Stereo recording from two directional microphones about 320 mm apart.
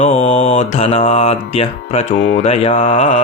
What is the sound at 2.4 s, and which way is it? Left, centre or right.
Mantra, centre.